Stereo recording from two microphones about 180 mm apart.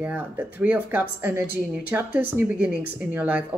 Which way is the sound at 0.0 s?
10° right (ahead or behind).